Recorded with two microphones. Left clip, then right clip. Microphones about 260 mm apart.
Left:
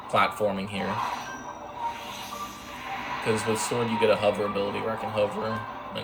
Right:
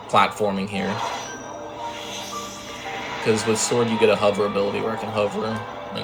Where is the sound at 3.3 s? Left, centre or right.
Centre.